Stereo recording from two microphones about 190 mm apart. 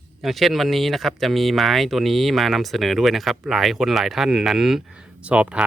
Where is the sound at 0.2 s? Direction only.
Centre (ahead or behind).